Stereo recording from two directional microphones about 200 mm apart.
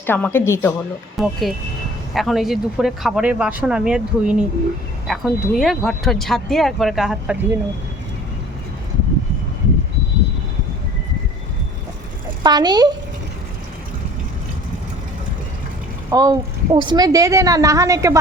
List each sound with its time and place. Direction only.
0.0 s speech: 10° left (ahead or behind)
1.2 s speech: centre (ahead or behind)
12.4 s a woman's voice: 20° right (ahead or behind)
16.0 s a woman's voice: 15° right (ahead or behind)